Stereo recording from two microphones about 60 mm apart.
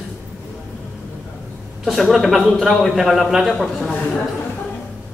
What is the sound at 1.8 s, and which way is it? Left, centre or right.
A man's voice, centre.